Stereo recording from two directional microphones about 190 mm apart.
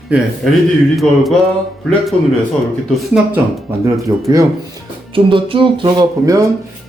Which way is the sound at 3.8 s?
20° right (ahead or behind).